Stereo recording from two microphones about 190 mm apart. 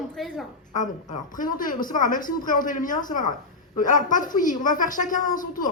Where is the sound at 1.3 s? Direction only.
45° left (ahead or behind).